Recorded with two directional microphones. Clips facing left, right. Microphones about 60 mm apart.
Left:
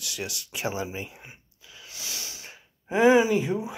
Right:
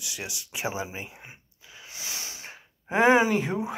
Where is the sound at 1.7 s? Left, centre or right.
Right.